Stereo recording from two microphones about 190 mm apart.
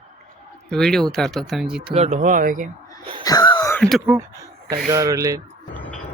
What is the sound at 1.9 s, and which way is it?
Speech, 35° right (ahead or behind).